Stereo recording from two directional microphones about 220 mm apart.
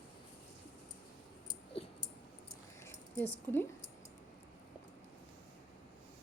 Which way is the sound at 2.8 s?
10° left (ahead or behind).